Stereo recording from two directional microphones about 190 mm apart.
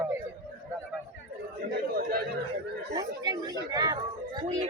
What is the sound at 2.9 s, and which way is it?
Chatter, 15° right (ahead or behind).